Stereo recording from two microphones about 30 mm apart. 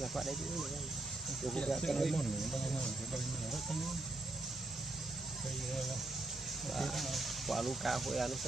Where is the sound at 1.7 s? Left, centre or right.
Centre.